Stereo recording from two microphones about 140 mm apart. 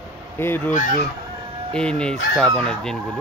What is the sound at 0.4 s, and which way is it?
Speech, 15° left (ahead or behind).